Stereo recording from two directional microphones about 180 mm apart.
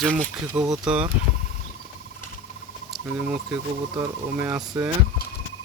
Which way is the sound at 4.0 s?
20° right (ahead or behind).